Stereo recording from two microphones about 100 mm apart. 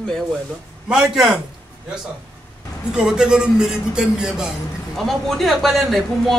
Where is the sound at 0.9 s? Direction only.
5° right (ahead or behind).